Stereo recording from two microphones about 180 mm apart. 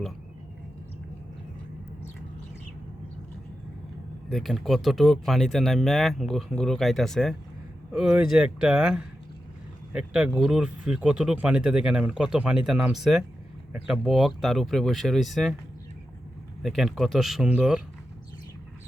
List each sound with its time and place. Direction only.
4.3 s speech: centre (ahead or behind)
16.6 s speech: centre (ahead or behind)